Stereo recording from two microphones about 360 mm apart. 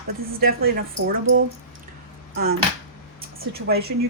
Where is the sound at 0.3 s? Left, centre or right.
Right.